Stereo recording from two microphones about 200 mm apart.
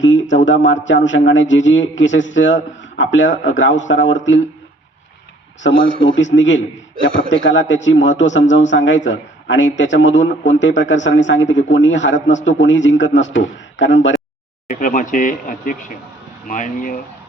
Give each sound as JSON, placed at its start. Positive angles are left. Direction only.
{"t": 0.0, "sound": "a sound", "side_deg": 70}
{"t": 0.4, "sound": "a man's voice", "side_deg": 70}
{"t": 5.6, "sound": "a man's voice", "side_deg": 70}
{"t": 14.7, "sound": "speech", "side_deg": 40}